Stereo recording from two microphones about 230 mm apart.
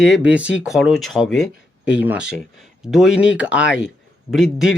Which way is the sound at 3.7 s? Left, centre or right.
Left.